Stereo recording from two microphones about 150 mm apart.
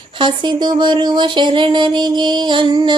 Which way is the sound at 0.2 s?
30° right (ahead or behind).